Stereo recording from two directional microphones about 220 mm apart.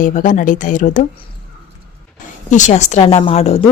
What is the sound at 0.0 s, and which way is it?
Speech, 35° left (ahead or behind).